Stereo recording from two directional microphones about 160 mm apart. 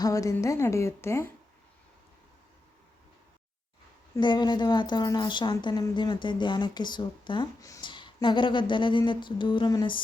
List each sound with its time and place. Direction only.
0.0 s a woman's voice: 20° left (ahead or behind)
4.1 s a woman's voice: 30° left (ahead or behind)